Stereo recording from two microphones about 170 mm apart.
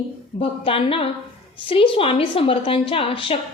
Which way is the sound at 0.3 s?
35° left (ahead or behind).